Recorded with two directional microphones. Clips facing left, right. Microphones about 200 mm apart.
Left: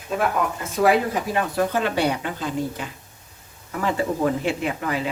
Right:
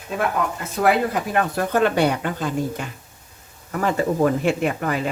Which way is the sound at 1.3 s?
50° right (ahead or behind).